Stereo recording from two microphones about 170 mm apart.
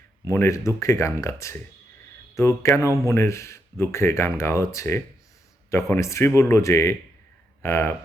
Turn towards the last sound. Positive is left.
turn(degrees=15)  # may be behind; listen again after turning